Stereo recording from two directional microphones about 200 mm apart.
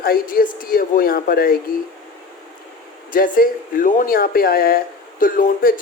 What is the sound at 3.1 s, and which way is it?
Speech, 45° left (ahead or behind).